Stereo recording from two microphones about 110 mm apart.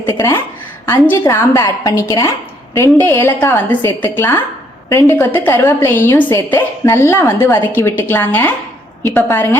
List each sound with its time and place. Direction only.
0.2 s a woman's voice: 20° left (ahead or behind)